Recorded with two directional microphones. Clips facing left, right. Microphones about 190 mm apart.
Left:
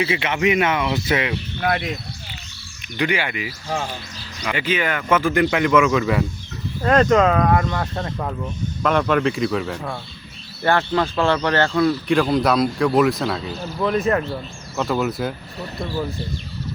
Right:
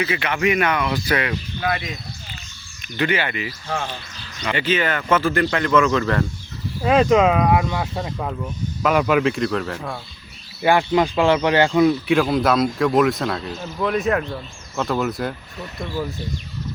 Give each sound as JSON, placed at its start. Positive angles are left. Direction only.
{"t": 0.1, "sound": "speech", "side_deg": 25}
{"t": 3.0, "sound": "speech", "side_deg": 10}
{"t": 6.8, "sound": "speech", "side_deg": -10}
{"t": 10.6, "sound": "speech", "side_deg": -10}
{"t": 12.0, "sound": "speech", "side_deg": 0}